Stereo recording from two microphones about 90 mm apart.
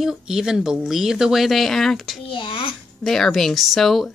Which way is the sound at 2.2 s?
70° left (ahead or behind).